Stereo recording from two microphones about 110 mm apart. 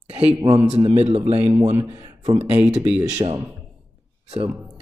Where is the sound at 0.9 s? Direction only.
75° right (ahead or behind).